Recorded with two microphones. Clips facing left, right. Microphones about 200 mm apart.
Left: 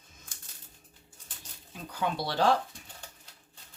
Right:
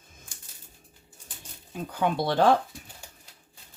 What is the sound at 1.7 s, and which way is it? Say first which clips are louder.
Speech: right 6 dB; 50° right (ahead or behind).